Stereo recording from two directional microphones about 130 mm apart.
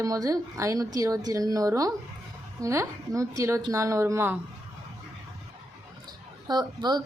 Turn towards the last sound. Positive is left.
turn(degrees=-35)  # may be behind; listen again after turning